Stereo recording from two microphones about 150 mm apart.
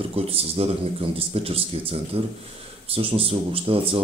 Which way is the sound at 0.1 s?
40° right (ahead or behind).